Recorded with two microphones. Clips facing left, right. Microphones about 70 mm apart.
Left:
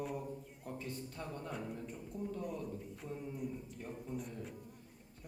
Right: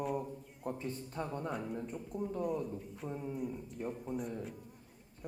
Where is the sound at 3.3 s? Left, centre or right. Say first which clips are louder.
Right 3 dB; centre.